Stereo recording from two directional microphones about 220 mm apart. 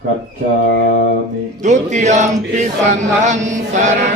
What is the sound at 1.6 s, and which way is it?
Chant, 35° right (ahead or behind).